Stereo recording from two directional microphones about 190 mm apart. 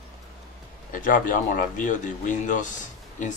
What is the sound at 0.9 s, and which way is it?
Speech, 45° left (ahead or behind).